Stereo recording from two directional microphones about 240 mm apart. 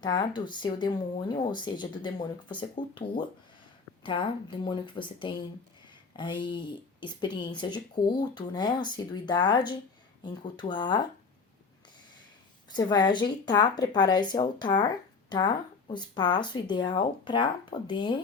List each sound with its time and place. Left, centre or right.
0.0 s speech: centre
12.7 s speech: centre